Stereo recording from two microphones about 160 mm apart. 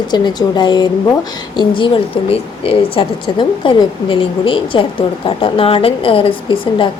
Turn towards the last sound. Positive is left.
turn(degrees=35)  # may be behind; listen again after turning